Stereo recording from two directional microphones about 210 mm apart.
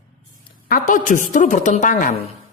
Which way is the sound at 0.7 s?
40° left (ahead or behind).